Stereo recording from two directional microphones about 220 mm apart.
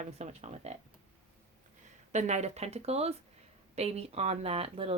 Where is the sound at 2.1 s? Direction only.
30° right (ahead or behind).